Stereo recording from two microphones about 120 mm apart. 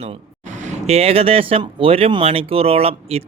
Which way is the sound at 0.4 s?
90° right.